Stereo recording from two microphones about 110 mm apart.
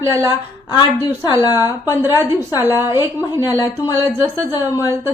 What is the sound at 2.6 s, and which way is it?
A woman's voice, 25° right (ahead or behind).